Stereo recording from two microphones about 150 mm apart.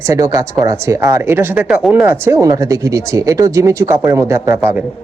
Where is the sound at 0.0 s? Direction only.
20° right (ahead or behind).